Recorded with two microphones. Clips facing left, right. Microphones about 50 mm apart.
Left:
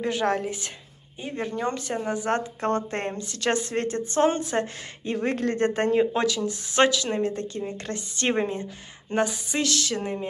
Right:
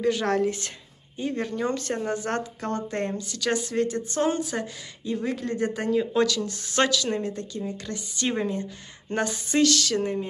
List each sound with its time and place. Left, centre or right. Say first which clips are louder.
0.0 s speech: right 2 dB; centre
2.6 s speech: left 2 dB; left
5.0 s speech: left 3 dB; left
5.7 s speech: left 3 dB; left
6.1 s speech: right 1 dB; left
7.2 s speech: left 2 dB; left
8.4 s speech: left 1 dB; left
9.1 s speech: left 1 dB; centre
9.6 s speech: right 5 dB; left